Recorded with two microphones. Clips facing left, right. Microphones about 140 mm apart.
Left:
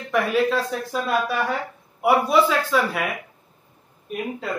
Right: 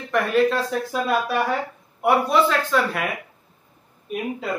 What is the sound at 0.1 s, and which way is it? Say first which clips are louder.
Speech: right 1 dB; centre (ahead or behind).